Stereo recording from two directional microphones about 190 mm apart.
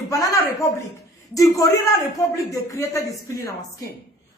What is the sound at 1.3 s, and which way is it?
Speech, 15° left (ahead or behind).